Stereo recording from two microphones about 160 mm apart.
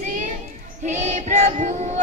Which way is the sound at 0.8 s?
50° right (ahead or behind).